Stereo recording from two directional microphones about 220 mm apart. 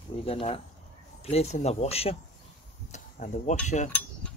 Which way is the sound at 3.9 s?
10° left (ahead or behind).